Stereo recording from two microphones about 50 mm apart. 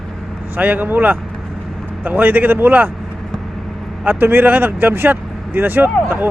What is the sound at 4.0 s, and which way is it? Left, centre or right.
Speech, right.